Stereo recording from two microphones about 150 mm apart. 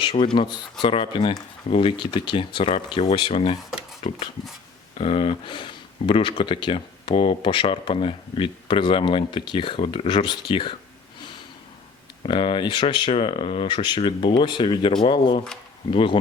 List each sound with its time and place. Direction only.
0.0 s a sound: 35° left (ahead or behind)
0.3 s speech: 30° left (ahead or behind)
4.9 s speech: 40° left (ahead or behind)
12.2 s speech: 35° left (ahead or behind)